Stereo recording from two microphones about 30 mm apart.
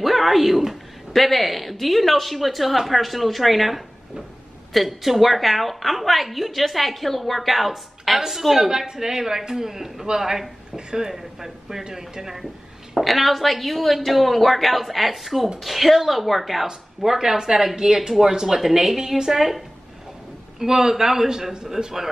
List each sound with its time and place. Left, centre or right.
0.0 s a woman's voice: centre
8.7 s a man's voice: centre
12.9 s a woman's voice: centre; by 19.3 s right
19.3 s a man's voice: centre